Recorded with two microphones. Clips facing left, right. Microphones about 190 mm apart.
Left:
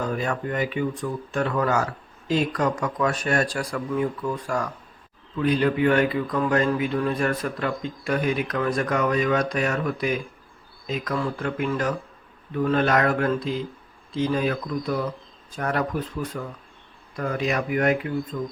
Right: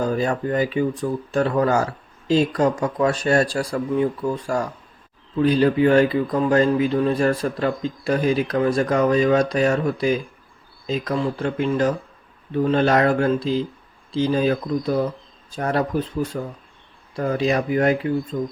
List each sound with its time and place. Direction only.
0.0 s speech: 30° right (ahead or behind)